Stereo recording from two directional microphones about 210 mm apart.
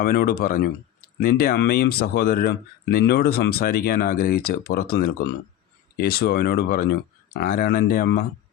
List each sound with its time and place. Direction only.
0.0 s speech: 45° left (ahead or behind)